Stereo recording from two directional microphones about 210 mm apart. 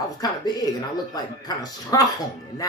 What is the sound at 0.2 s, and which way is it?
Speech, 15° left (ahead or behind).